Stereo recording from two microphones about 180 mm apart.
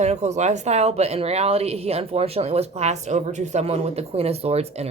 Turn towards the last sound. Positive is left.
turn(degrees=-35)  # may be behind; listen again after turning